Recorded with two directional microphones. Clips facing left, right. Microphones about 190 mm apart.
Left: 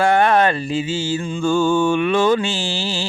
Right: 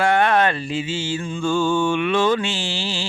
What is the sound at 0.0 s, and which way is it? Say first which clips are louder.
Music: left 2 dB; 40° left (ahead or behind).